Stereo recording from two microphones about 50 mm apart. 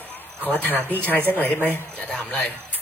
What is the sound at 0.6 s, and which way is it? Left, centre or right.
A man's voice, left.